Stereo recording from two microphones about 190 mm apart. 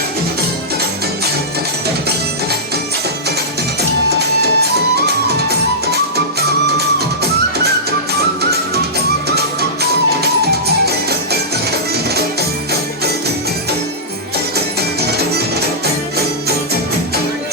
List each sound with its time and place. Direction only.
4.1 s music: 60° right (ahead or behind)
9.3 s music: 55° right (ahead or behind)